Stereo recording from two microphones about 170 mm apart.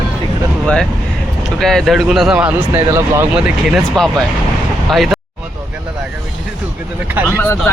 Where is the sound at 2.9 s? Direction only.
15° right (ahead or behind).